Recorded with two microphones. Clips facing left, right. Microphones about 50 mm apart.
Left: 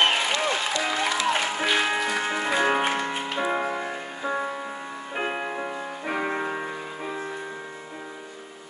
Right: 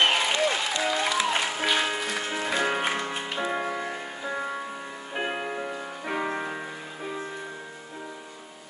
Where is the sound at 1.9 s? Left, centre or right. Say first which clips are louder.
Left 4 dB; left.